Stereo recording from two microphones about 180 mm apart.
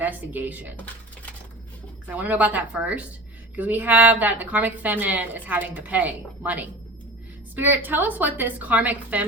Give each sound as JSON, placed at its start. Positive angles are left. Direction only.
{"t": 0.0, "sound": "a woman's voice", "side_deg": -10}
{"t": 2.0, "sound": "a woman's voice", "side_deg": -10}